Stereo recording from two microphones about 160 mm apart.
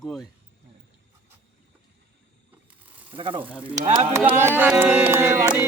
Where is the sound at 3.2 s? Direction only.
35° right (ahead or behind).